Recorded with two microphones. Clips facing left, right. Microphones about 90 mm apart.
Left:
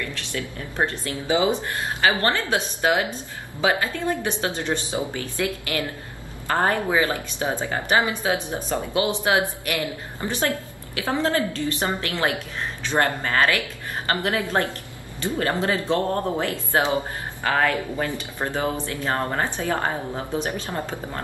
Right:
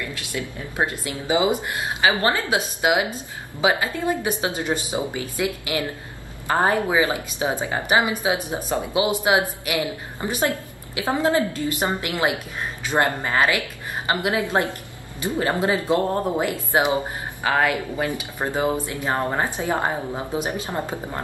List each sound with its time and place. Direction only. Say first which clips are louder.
0.0 s a woman's voice: even; 15° right (ahead or behind)